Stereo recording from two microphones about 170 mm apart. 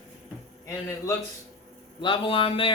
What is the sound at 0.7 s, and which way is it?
Speech, 15° left (ahead or behind).